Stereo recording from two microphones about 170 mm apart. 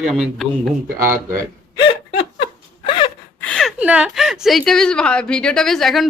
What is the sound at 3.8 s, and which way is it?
A woman's voice, 5° right (ahead or behind).